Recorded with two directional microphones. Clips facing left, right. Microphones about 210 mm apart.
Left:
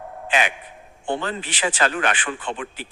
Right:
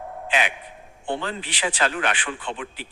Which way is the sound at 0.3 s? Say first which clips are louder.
Left 2 dB; 45° left (ahead or behind).